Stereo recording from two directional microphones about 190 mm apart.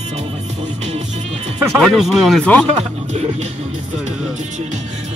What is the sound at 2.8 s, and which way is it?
Speech, 35° right (ahead or behind).